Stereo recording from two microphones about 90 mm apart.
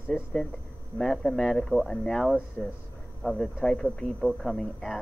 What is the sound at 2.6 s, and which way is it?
Speech, 20° left (ahead or behind).